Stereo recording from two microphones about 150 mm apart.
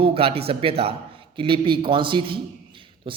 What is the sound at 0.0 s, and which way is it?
A man's voice, 40° right (ahead or behind).